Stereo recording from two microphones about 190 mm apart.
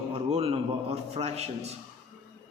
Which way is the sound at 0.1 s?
35° right (ahead or behind).